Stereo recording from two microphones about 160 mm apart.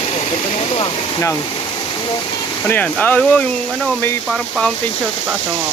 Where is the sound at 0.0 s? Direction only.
40° left (ahead or behind).